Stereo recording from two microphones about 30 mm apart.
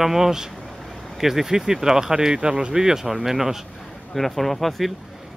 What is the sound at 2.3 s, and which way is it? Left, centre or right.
Speech, right.